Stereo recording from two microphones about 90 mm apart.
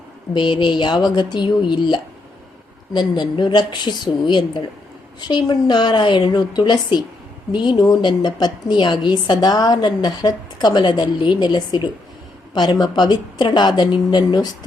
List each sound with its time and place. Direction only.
0.3 s a woman's voice: 60° left (ahead or behind)